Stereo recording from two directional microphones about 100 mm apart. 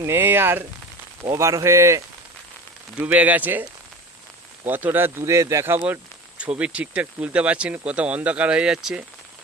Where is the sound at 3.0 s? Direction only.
15° right (ahead or behind).